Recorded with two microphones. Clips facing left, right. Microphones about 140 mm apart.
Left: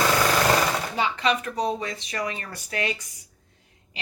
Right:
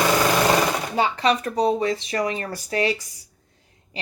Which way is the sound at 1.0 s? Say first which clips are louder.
Right 5 dB; 40° right (ahead or behind).